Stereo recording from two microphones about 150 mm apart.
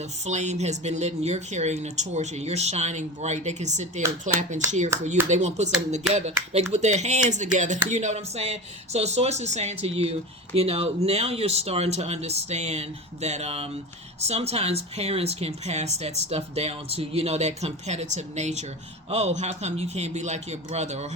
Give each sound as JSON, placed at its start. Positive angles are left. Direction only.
{"t": 0.3, "sound": "speech", "side_deg": -50}